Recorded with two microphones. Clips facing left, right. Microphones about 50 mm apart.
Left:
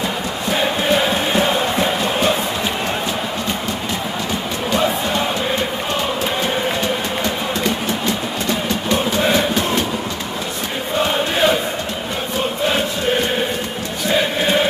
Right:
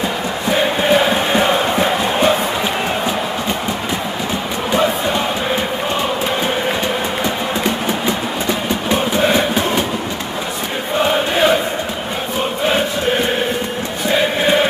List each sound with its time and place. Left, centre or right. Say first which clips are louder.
0.5 s chant: right 3 dB; centre
4.6 s crowd: right 2 dB; centre
8.5 s train: right 1 dB; centre
11.0 s chant: right 2 dB; centre
12.6 s chant: right 3 dB; centre